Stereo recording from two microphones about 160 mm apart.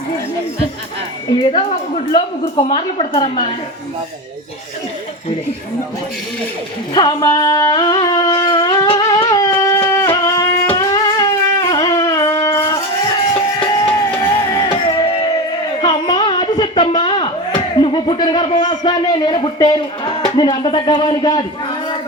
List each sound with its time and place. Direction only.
2.1 s a woman's voice: 30° left (ahead or behind)
6.9 s music: 25° left (ahead or behind)
15.8 s a sound: 30° left (ahead or behind)
20.3 s a woman's voice: 30° left (ahead or behind)